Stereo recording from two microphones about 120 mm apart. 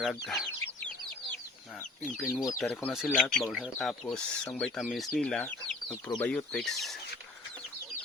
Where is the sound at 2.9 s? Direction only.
5° right (ahead or behind).